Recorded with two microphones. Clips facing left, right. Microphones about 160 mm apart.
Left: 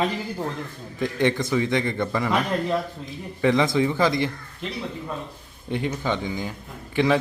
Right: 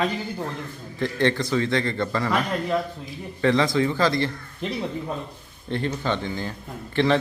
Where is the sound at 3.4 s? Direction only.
15° left (ahead or behind).